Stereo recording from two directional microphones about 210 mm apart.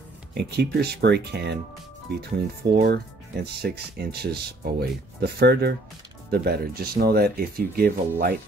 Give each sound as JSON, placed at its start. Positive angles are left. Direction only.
{"t": 0.3, "sound": "speech", "side_deg": -50}